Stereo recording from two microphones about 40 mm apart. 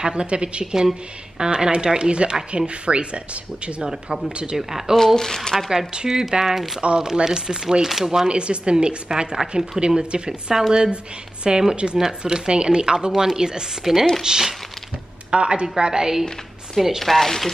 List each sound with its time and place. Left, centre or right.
0.0 s a woman's voice: right
3.8 s speech: centre
4.3 s a woman's voice: right
4.6 s speech: centre
4.9 s speech: centre
5.9 s speech: centre
8.3 s a woman's voice: right
17.0 s speech: centre